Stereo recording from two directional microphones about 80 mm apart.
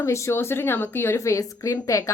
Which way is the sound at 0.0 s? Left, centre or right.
Left.